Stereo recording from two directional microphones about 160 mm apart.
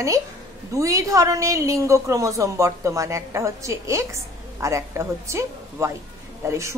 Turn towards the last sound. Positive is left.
turn(degrees=-20)  # may be behind; listen again after turning